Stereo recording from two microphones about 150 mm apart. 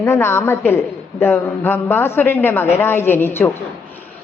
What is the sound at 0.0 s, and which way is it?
A woman's voice, 15° left (ahead or behind).